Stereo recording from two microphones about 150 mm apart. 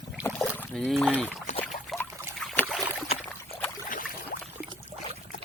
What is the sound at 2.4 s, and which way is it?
Boat, 5° left (ahead or behind).